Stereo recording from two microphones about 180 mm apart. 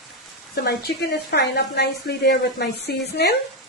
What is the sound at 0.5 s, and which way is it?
A woman's voice, 60° left (ahead or behind).